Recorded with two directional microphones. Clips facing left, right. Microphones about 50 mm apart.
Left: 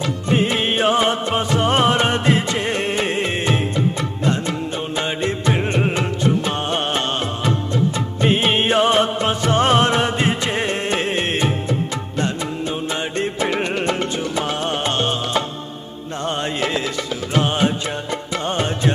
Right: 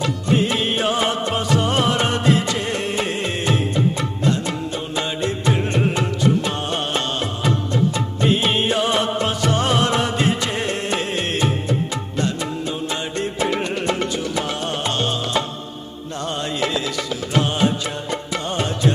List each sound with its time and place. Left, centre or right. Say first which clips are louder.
0.3 s music: left 2 dB; left
5.0 s music: left 1 dB; left
8.2 s music: left 2 dB; left
13.0 s music: left 1 dB; left